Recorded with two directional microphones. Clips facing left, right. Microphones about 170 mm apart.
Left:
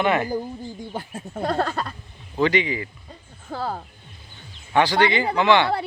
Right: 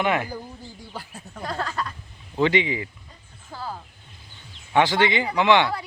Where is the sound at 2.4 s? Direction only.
20° right (ahead or behind).